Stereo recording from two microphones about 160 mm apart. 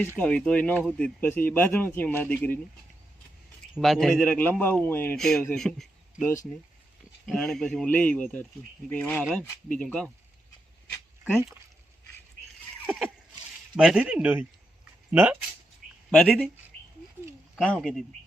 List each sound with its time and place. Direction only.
0.2 s a man's voice: 5° left (ahead or behind)
3.8 s a man's voice: centre (ahead or behind)
5.1 s a man's voice: centre (ahead or behind)
6.2 s speech: 20° left (ahead or behind)
7.3 s a man's voice: centre (ahead or behind)
12.8 s a sound: 10° right (ahead or behind)
13.7 s speech: 5° right (ahead or behind)
16.1 s speech: 5° left (ahead or behind)
17.6 s speech: 5° left (ahead or behind)